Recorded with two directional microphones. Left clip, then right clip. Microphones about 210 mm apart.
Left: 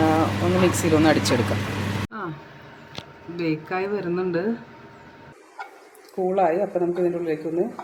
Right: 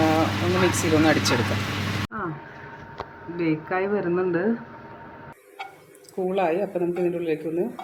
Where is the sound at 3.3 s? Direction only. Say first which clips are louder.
Right 1 dB; 10° left (ahead or behind).